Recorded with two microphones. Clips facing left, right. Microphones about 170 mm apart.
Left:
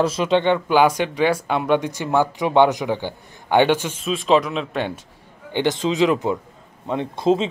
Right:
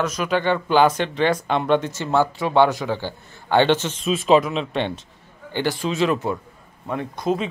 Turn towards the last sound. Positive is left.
turn(degrees=25)  # may be behind; listen again after turning